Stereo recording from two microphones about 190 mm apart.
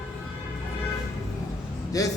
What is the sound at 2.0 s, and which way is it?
Speech, 20° left (ahead or behind).